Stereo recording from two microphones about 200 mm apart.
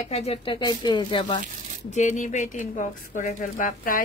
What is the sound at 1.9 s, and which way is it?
A woman's voice, 35° left (ahead or behind).